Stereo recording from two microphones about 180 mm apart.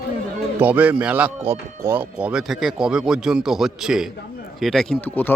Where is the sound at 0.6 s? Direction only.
10° right (ahead or behind).